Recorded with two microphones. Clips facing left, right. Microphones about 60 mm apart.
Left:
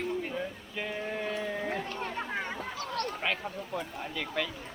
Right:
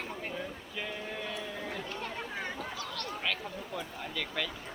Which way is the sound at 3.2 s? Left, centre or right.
Left.